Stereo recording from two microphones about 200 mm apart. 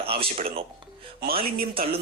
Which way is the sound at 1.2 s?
50° right (ahead or behind).